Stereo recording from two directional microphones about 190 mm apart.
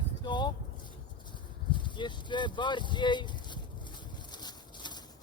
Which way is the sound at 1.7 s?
25° left (ahead or behind).